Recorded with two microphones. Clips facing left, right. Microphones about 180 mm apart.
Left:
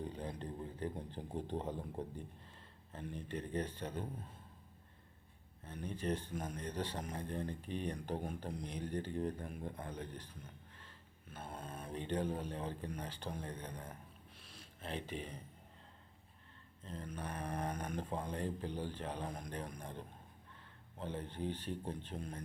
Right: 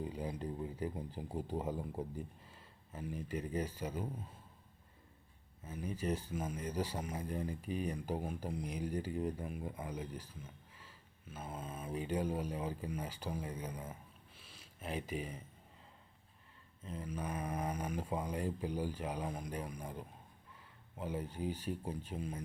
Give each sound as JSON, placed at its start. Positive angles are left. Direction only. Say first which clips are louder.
{"t": 0.0, "sound": "speech", "louder": "right 3 dB", "side_deg": -10}
{"t": 5.6, "sound": "speech", "louder": "right 1 dB", "side_deg": -5}
{"t": 14.3, "sound": "a sound", "louder": "left 1 dB", "side_deg": -5}
{"t": 16.8, "sound": "speech", "louder": "right 3 dB", "side_deg": -5}